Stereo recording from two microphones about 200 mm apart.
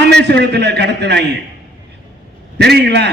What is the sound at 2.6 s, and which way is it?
Speech, 55° right (ahead or behind).